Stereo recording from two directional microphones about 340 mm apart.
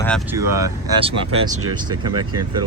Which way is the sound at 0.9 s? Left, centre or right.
Centre.